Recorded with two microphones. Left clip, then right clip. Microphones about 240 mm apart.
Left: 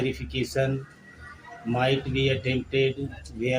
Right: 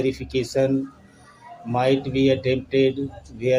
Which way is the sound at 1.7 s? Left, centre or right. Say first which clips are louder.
Right 4 dB; right.